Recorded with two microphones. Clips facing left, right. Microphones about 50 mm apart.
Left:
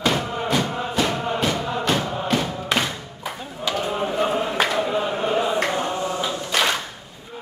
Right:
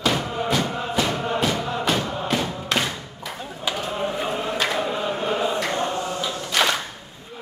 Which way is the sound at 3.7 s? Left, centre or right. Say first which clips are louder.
Left 5 dB; centre.